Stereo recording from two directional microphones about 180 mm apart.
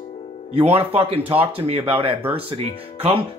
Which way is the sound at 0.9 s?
30° right (ahead or behind).